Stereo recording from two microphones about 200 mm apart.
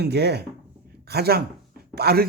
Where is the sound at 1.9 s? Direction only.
50° right (ahead or behind).